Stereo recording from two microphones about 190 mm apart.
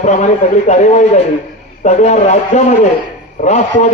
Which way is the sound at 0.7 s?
40° left (ahead or behind).